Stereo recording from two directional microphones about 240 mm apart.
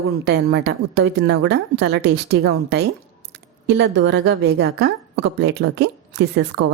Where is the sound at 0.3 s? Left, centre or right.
Right.